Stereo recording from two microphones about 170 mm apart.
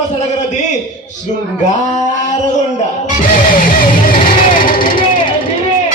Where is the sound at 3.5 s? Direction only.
55° left (ahead or behind).